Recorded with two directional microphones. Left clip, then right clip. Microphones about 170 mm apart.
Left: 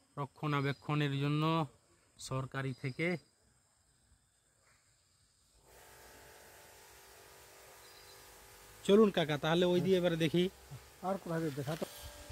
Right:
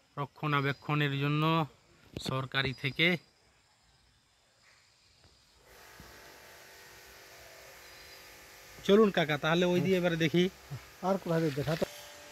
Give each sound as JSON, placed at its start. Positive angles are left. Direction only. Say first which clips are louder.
{"t": 0.1, "sound": "speech", "louder": "right 5 dB", "side_deg": 15}
{"t": 8.8, "sound": "speech", "louder": "right 3 dB", "side_deg": 15}
{"t": 11.0, "sound": "speech", "louder": "right 7 dB", "side_deg": -60}